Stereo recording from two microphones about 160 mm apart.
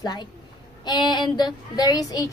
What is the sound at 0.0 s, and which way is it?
A woman's voice, 25° left (ahead or behind).